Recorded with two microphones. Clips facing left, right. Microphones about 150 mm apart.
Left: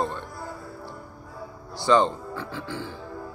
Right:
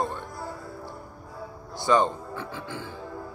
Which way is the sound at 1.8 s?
20° right (ahead or behind).